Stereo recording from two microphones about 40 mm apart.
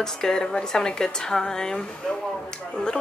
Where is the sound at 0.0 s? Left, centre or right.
Centre.